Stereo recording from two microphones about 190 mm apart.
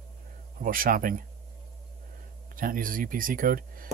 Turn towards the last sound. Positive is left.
turn(degrees=-50)  # may be behind; listen again after turning